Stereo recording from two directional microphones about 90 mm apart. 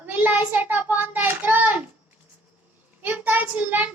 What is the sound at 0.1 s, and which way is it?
Child singing, 20° right (ahead or behind).